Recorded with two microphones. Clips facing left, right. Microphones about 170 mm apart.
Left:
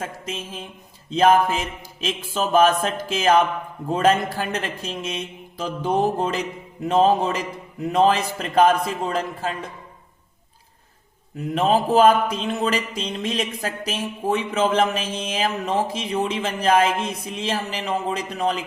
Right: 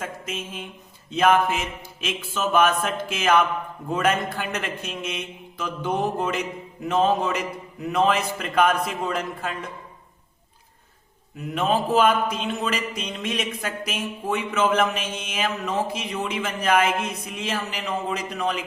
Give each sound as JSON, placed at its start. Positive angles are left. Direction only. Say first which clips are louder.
{"t": 0.0, "sound": "speech", "louder": "left 1 dB", "side_deg": 30}
{"t": 11.5, "sound": "speech", "louder": "left 3 dB", "side_deg": 35}